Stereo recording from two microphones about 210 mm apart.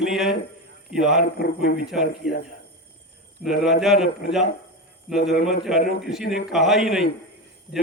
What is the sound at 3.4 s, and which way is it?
Speech, centre (ahead or behind).